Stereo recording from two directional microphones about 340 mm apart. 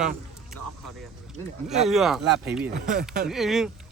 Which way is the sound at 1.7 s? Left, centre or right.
Centre.